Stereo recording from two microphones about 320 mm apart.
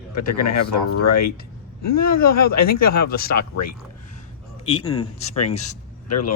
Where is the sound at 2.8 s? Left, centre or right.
Left.